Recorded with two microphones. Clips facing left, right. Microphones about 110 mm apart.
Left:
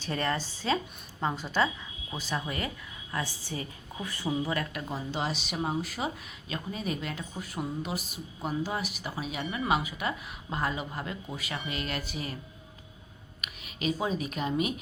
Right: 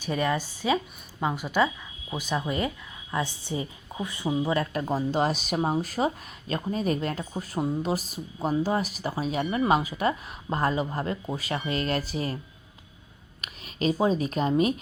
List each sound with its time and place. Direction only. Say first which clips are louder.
0.0 s a woman's voice: right 4 dB; 10° right (ahead or behind)
4.9 s speech: right 8 dB; 40° right (ahead or behind)
13.4 s speech: right 5 dB; 35° right (ahead or behind)